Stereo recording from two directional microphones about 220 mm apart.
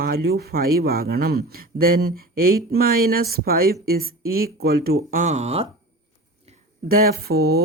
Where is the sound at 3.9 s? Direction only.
45° right (ahead or behind).